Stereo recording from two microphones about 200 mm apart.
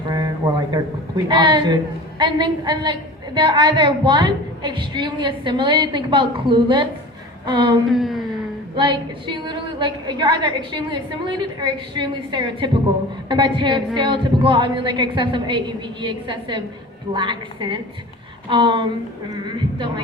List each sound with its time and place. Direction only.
0.1 s a woman's voice: 20° right (ahead or behind)
7.4 s a sound: 25° right (ahead or behind)
7.9 s speech: centre (ahead or behind)
8.3 s a woman's voice: 25° right (ahead or behind)